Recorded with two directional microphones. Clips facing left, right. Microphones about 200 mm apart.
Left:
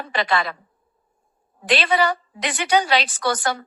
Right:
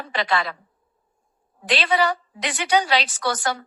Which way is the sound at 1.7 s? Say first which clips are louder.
Left 1 dB; 55° left (ahead or behind).